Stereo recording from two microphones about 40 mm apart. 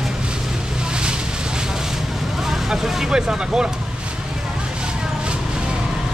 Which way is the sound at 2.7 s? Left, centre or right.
Centre.